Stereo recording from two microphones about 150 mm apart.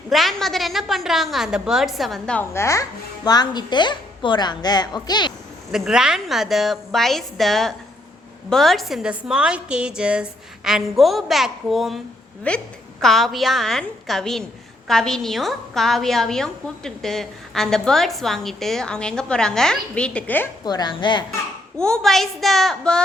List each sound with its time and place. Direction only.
0.1 s a woman's voice: centre (ahead or behind); by 5.3 s 30° left (ahead or behind)
5.7 s a woman's voice: 5° right (ahead or behind); by 20.5 s 10° left (ahead or behind)
20.7 s a woman's voice: 30° left (ahead or behind)
21.8 s a woman's voice: 5° left (ahead or behind)